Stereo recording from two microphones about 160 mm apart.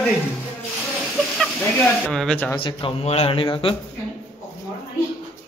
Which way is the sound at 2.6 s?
35° left (ahead or behind).